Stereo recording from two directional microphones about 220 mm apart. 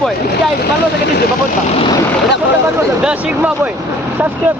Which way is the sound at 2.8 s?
5° right (ahead or behind).